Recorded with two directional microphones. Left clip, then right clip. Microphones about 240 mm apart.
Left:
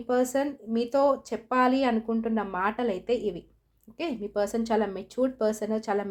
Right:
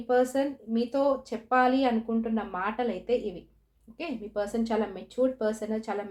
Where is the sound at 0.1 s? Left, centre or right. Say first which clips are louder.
Right 1 dB; left.